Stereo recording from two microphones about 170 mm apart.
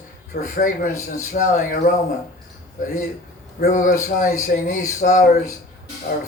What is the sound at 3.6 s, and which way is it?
A man's voice, 50° left (ahead or behind).